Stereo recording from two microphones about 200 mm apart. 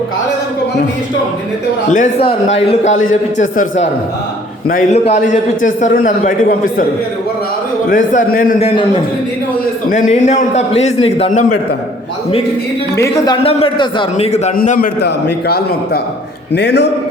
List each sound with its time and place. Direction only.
1.9 s a man's voice: 35° left (ahead or behind)
7.9 s a man's voice: 45° left (ahead or behind)
9.9 s a man's voice: 35° left (ahead or behind)
13.4 s a man's voice: 30° left (ahead or behind); by 16.9 s 60° left (ahead or behind)